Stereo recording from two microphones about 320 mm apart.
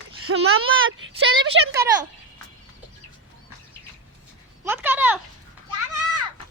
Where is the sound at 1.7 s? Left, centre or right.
Centre.